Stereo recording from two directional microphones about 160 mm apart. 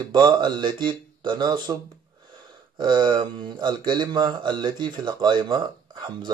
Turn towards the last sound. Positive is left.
turn(degrees=-30)  # may be behind; listen again after turning